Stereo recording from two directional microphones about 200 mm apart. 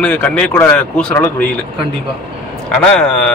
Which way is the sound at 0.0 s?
5° left (ahead or behind).